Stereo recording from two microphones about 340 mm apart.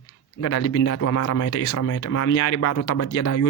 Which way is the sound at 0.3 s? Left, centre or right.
Left.